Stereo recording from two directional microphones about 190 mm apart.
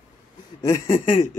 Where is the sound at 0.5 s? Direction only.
15° left (ahead or behind).